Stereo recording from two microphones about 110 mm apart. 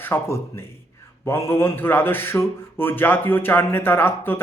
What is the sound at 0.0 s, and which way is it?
Speech, 20° left (ahead or behind).